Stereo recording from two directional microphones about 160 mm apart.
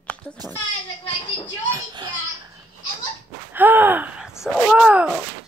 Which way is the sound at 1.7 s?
25° right (ahead or behind).